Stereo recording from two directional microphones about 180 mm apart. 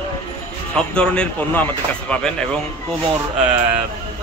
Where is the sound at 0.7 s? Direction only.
5° left (ahead or behind).